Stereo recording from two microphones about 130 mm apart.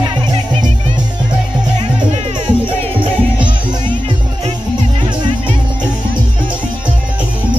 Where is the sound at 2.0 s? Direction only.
40° right (ahead or behind).